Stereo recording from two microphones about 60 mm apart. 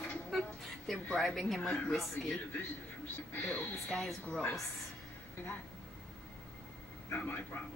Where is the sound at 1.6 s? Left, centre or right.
Centre.